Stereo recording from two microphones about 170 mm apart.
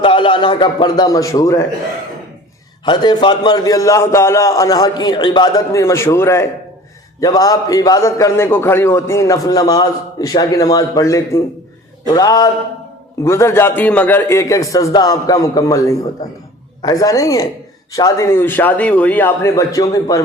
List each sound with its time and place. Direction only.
0.0 s a man's voice: 30° left (ahead or behind)
2.8 s a man's voice: 25° left (ahead or behind)